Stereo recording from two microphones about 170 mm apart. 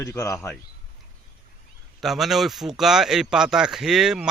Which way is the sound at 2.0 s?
Centre (ahead or behind).